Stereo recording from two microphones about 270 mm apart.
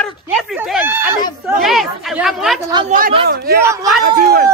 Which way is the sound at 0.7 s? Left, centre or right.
Centre.